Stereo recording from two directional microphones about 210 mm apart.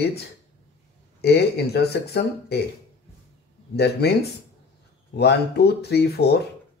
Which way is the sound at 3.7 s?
50° left (ahead or behind).